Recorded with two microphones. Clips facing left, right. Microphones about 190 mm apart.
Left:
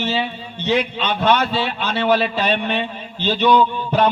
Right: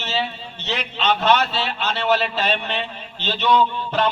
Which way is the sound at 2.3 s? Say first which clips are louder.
Left 3 dB; 50° left (ahead or behind).